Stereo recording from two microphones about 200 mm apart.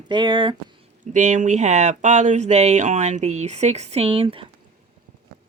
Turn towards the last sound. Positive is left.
turn(degrees=-25)  # may be behind; listen again after turning